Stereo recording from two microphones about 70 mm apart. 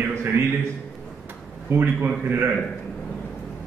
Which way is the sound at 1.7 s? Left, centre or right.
Right.